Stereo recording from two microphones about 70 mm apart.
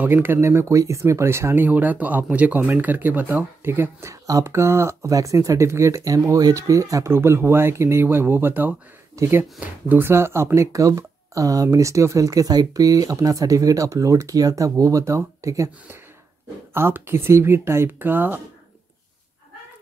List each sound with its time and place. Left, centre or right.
0.0 s speech: right
4.1 s speech: right
7.1 s speech: right
9.2 s speech: right
9.8 s speech: right
16.7 s speech: right